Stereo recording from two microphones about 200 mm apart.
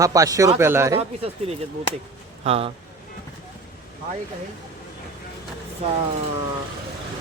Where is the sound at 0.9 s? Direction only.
30° right (ahead or behind).